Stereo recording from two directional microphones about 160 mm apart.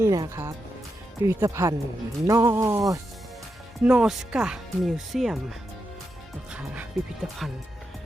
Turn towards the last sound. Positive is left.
turn(degrees=0)  # may be behind; listen again after turning